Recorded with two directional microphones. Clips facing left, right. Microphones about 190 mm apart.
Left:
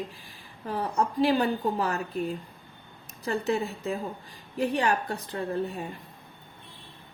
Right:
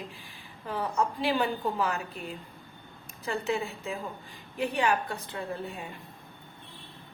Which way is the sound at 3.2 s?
40° left (ahead or behind).